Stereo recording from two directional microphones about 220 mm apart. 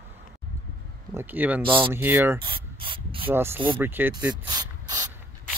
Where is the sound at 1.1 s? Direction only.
10° right (ahead or behind).